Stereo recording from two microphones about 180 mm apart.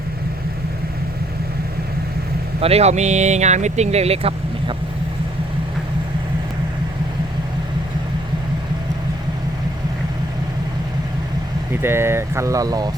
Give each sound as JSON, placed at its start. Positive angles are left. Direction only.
{"t": 2.6, "sound": "speech", "side_deg": -35}
{"t": 11.7, "sound": "speech", "side_deg": -15}